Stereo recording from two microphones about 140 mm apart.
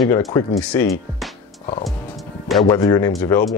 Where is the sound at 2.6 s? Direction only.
25° left (ahead or behind).